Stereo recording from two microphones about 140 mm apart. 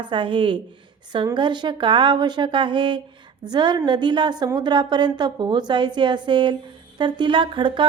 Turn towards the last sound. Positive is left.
turn(degrees=-35)  # may be behind; listen again after turning